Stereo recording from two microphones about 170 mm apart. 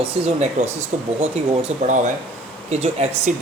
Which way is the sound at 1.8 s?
45° right (ahead or behind).